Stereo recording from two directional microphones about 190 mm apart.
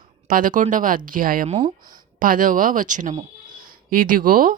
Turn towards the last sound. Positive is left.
turn(degrees=-45)  # may be behind; listen again after turning